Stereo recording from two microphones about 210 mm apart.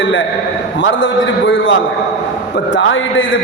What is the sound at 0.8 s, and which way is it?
A man's voice, 60° left (ahead or behind).